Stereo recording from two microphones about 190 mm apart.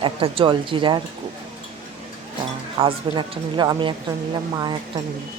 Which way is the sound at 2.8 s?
30° right (ahead or behind).